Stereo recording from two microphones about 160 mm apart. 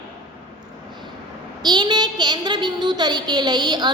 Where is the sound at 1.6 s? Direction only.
30° right (ahead or behind).